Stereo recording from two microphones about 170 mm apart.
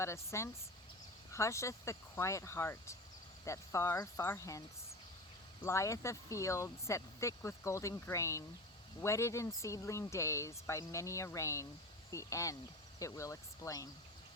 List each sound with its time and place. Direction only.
0.0 s speech: 15° left (ahead or behind)
5.6 s speech: 15° left (ahead or behind)